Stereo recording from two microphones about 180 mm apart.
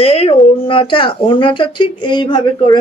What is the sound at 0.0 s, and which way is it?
A woman's voice, 35° left (ahead or behind).